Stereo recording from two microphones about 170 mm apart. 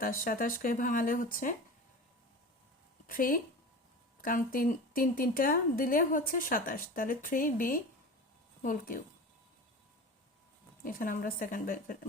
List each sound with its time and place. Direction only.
0.0 s a woman's voice: 55° left (ahead or behind)
3.1 s a woman's voice: 55° left (ahead or behind)
10.8 s a woman's voice: 55° left (ahead or behind)